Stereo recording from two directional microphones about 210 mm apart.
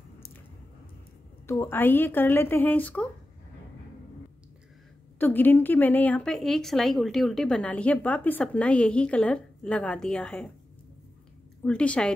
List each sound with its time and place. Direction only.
1.5 s speech: 10° left (ahead or behind)
5.2 s a woman's voice: 10° left (ahead or behind)
11.6 s a woman's voice: 5° left (ahead or behind)